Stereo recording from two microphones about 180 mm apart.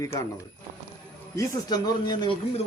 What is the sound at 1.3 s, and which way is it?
Speech, 20° left (ahead or behind).